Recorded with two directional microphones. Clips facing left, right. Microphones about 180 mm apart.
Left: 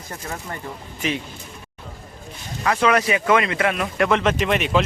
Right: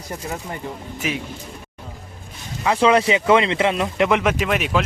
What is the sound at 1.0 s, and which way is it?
Speech, 10° right (ahead or behind).